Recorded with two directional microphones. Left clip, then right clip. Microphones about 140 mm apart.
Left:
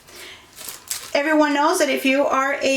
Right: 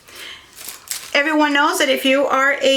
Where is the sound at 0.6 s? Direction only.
Centre (ahead or behind).